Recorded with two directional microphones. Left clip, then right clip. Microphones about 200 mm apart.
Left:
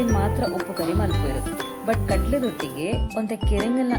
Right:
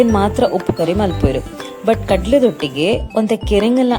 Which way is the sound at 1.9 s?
45° right (ahead or behind).